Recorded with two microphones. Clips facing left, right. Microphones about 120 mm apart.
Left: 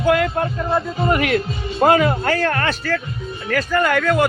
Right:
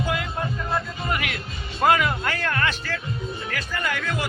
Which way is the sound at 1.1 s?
40° left (ahead or behind).